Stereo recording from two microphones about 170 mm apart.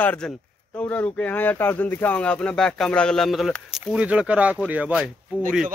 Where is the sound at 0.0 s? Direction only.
10° left (ahead or behind); by 5.1 s 5° right (ahead or behind).